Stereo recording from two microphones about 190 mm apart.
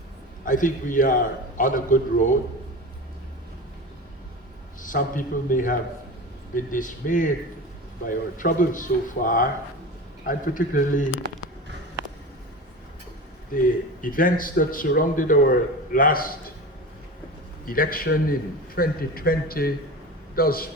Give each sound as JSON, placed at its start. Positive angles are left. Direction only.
{"t": 0.4, "sound": "a man's voice", "side_deg": 45}
{"t": 4.8, "sound": "a man's voice", "side_deg": 45}
{"t": 14.0, "sound": "a man's voice", "side_deg": 45}
{"t": 17.7, "sound": "a man's voice", "side_deg": 50}